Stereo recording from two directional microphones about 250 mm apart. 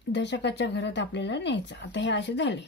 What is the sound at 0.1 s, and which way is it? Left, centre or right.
A woman's voice, left.